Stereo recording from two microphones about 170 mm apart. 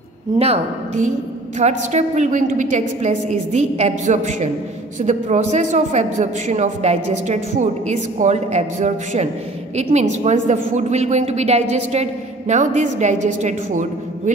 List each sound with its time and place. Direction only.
0.4 s a woman's voice: 35° right (ahead or behind)